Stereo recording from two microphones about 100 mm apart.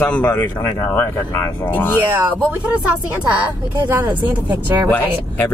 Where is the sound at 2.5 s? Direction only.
15° right (ahead or behind).